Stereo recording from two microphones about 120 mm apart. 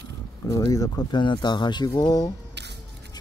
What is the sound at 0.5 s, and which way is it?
Speech, 30° left (ahead or behind).